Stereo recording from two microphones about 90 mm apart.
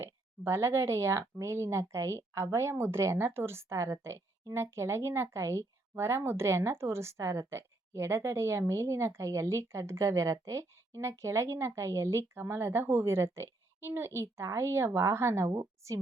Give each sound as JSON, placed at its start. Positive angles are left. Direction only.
{"t": 0.0, "sound": "speech", "side_deg": -25}